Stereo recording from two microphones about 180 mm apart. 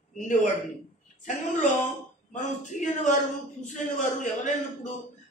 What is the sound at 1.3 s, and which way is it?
A man's voice, 45° left (ahead or behind).